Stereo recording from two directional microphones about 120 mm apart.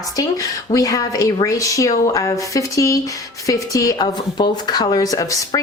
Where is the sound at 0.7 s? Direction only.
30° left (ahead or behind).